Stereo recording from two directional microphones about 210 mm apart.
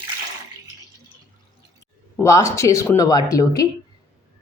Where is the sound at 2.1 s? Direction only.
15° left (ahead or behind).